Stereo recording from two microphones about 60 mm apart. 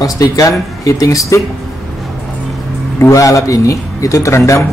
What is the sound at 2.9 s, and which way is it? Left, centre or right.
Speech, left.